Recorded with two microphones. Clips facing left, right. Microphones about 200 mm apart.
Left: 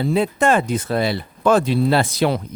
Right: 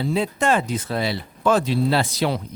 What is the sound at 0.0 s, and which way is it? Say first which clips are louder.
Speech: left 4 dB; 55° left (ahead or behind).